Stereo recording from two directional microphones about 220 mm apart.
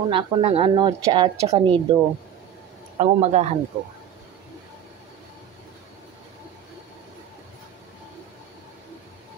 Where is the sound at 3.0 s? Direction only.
30° right (ahead or behind).